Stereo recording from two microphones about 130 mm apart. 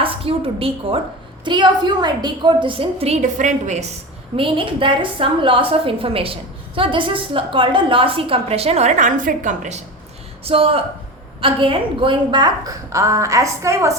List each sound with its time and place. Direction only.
0.0 s a woman's voice: 45° right (ahead or behind)
1.5 s a woman's voice: 35° right (ahead or behind); by 3.9 s 60° right (ahead or behind)
4.4 s a woman's voice: 45° right (ahead or behind); by 9.8 s 70° right (ahead or behind)
10.4 s a woman's voice: 45° right (ahead or behind); by 13.9 s 25° right (ahead or behind)